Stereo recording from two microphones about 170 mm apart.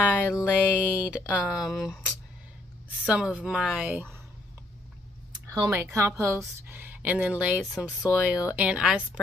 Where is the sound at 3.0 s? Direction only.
5° right (ahead or behind).